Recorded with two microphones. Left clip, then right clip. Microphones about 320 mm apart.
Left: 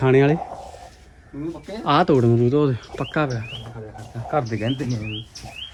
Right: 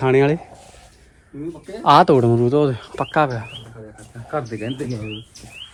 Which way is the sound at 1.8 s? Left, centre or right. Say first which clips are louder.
Right 5 dB; centre.